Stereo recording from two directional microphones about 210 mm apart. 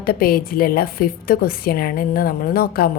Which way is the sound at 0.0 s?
45° left (ahead or behind).